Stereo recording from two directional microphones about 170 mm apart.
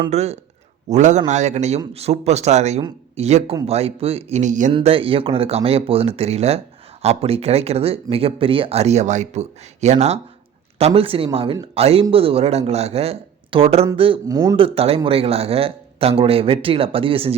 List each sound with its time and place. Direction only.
0.1 s a man's voice: 40° right (ahead or behind)
4.7 s speech: 35° right (ahead or behind)